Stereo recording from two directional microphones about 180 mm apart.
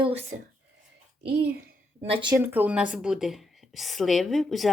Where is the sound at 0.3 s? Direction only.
50° right (ahead or behind).